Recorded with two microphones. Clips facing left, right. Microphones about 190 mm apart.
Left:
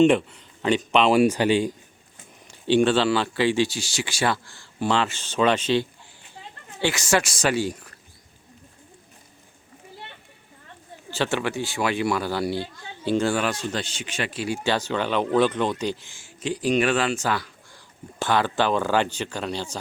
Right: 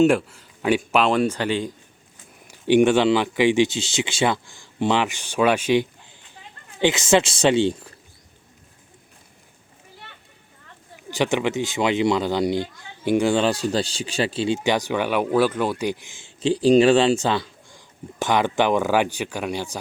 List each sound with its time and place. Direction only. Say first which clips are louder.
0.0 s speech: even; 5° right (ahead or behind)
1.1 s speech: left 3 dB; 10° left (ahead or behind)
2.5 s speech: right 3 dB; 15° right (ahead or behind)
11.1 s speech: right 4 dB; 15° right (ahead or behind)
13.4 s speech: right 6 dB; 35° right (ahead or behind); by 19.8 s 10° right (ahead or behind)